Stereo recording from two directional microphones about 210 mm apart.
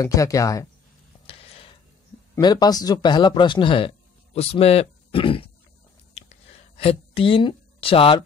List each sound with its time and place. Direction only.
0.0 s speech: 15° left (ahead or behind)
2.3 s speech: 20° left (ahead or behind)
6.8 s speech: 25° left (ahead or behind)